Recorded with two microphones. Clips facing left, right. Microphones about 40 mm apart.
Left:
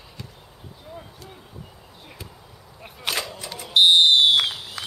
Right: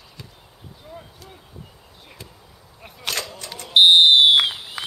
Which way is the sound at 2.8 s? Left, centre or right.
Centre.